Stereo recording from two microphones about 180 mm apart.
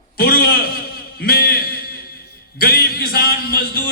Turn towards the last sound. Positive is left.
turn(degrees=60)  # may be behind; listen again after turning